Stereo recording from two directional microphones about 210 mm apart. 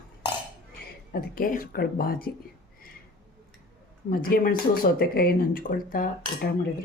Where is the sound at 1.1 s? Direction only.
45° left (ahead or behind).